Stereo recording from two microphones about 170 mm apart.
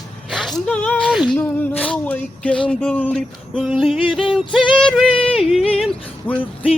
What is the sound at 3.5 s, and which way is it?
Music, 5° right (ahead or behind).